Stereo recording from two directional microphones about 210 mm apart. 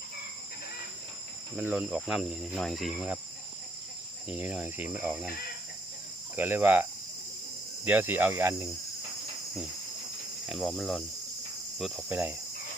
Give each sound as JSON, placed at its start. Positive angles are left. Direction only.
{"t": 1.5, "sound": "speech", "side_deg": 0}
{"t": 4.3, "sound": "speech", "side_deg": -5}
{"t": 6.3, "sound": "speech", "side_deg": -10}
{"t": 7.9, "sound": "speech", "side_deg": -10}
{"t": 10.5, "sound": "speech", "side_deg": 0}